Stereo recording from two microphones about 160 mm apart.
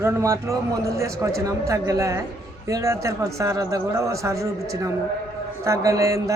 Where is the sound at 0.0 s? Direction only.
15° right (ahead or behind).